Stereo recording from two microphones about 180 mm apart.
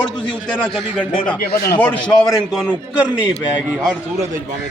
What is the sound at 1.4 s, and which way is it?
Speech, 60° left (ahead or behind).